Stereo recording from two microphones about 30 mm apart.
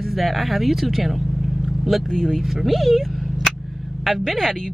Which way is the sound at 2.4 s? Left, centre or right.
Centre.